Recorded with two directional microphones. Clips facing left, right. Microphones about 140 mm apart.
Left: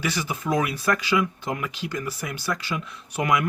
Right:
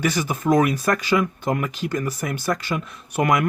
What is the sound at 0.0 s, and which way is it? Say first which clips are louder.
Speech: right 5 dB; 50° right (ahead or behind).